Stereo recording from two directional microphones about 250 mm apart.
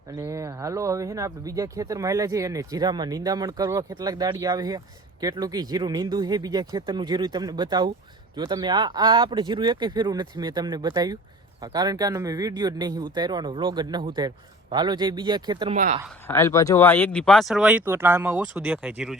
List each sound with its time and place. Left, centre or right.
0.2 s speech: centre
15.7 s speech: right
16.2 s speech: centre